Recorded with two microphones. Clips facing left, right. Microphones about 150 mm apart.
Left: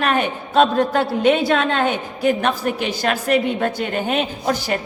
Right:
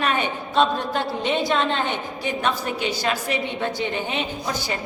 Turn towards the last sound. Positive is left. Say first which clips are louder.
# left 6 dB
turn(degrees=55)  # may be behind; listen again after turning